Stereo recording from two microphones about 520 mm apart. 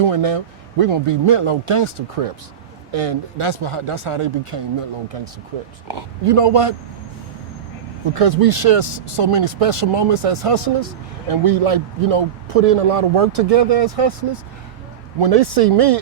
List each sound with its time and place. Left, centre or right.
0.1 s speech: right
2.9 s speech: right
5.9 s speech: right
8.1 s a man's voice: right